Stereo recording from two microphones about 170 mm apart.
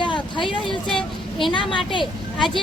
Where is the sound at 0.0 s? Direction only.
25° left (ahead or behind).